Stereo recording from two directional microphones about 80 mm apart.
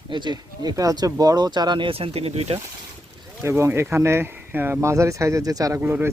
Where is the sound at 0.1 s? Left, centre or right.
Right.